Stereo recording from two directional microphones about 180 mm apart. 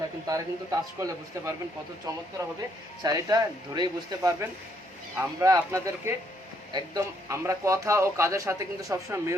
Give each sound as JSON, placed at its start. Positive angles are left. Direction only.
{"t": 0.3, "sound": "a man's voice", "side_deg": -20}